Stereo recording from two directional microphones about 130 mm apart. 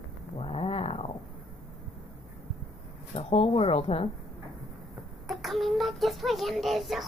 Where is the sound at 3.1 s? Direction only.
50° left (ahead or behind).